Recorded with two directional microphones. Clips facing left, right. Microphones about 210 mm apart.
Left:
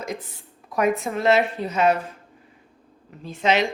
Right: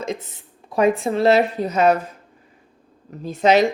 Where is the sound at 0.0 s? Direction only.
25° right (ahead or behind); by 2.0 s 40° right (ahead or behind).